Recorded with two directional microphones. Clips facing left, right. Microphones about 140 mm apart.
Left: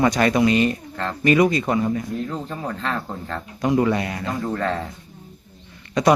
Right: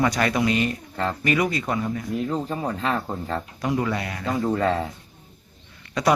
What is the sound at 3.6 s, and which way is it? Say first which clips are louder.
Speech: left 7 dB; 20° left (ahead or behind).